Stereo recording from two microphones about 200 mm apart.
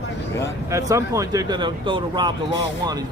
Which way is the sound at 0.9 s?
15° right (ahead or behind).